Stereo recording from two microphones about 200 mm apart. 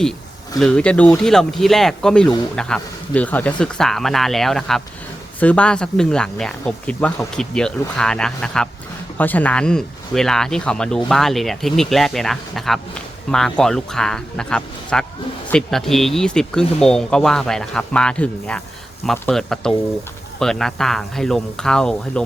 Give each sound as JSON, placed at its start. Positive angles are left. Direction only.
{"t": 0.6, "sound": "speech", "side_deg": 5}